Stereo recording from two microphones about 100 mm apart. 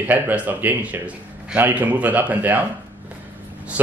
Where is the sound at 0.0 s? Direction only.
15° right (ahead or behind).